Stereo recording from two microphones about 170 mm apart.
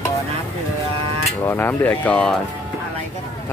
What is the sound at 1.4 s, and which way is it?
Speech, 10° left (ahead or behind).